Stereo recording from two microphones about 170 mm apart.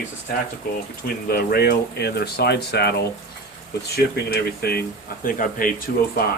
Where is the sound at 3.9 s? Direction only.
65° left (ahead or behind).